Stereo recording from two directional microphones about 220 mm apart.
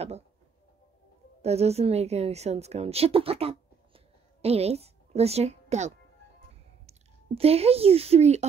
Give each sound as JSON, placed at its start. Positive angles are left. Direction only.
{"t": 1.4, "sound": "a woman's voice", "side_deg": -30}